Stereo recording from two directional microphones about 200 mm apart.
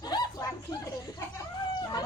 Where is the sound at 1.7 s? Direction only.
20° left (ahead or behind).